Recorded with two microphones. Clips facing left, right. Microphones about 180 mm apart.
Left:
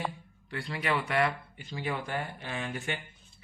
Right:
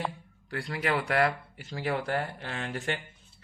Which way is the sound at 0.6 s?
70° right (ahead or behind).